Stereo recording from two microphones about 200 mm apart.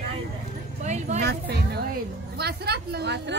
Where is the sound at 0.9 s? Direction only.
35° right (ahead or behind).